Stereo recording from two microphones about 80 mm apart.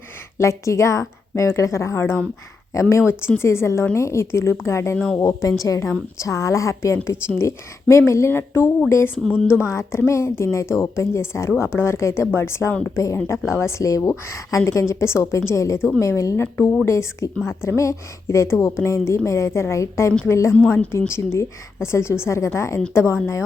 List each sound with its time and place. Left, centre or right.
0.3 s a woman's voice: left